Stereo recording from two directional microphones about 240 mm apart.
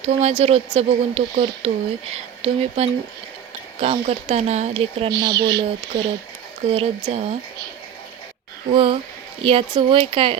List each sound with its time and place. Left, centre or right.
0.0 s speech: right
8.7 s speech: right